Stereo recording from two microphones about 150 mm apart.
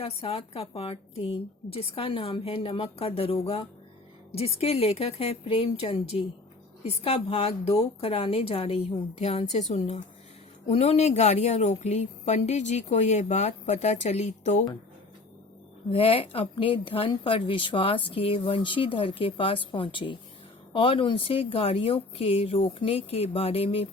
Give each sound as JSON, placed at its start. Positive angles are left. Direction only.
{"t": 0.0, "sound": "a woman's voice", "side_deg": 40}
{"t": 15.9, "sound": "a woman's voice", "side_deg": 40}